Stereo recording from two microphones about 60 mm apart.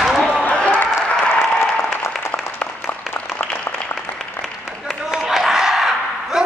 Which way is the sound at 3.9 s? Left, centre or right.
Centre.